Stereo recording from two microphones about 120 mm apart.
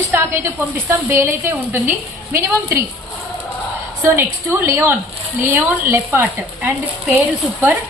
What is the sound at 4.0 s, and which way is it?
A woman's voice, 20° right (ahead or behind).